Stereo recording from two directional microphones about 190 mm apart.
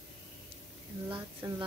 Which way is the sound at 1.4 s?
20° right (ahead or behind).